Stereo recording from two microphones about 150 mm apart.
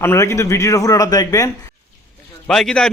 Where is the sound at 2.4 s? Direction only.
5° left (ahead or behind).